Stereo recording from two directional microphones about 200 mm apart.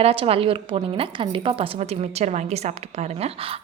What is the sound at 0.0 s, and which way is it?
A woman's voice, 30° right (ahead or behind).